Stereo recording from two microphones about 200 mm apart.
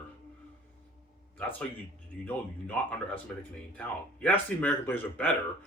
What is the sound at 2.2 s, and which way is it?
Speech, 10° left (ahead or behind).